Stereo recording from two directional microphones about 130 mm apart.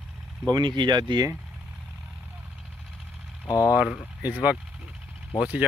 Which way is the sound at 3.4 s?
25° left (ahead or behind).